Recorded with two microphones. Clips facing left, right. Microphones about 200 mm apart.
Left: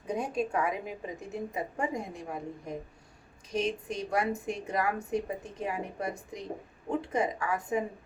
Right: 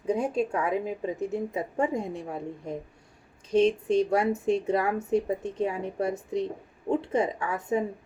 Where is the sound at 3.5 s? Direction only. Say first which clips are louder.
Right 9 dB; 30° right (ahead or behind).